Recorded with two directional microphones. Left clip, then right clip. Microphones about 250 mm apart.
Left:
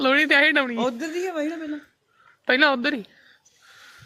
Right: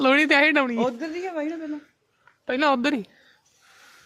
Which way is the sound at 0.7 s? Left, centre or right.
Left.